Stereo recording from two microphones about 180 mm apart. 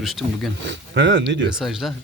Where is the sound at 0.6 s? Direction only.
80° right.